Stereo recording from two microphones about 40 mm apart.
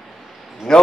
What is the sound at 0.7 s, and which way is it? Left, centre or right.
Speech, centre.